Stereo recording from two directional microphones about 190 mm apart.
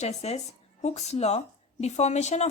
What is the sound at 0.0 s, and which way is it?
A woman's voice, 35° left (ahead or behind).